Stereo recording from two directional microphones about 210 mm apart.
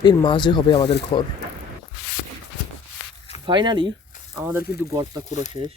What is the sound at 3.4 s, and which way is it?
Speech, 20° right (ahead or behind).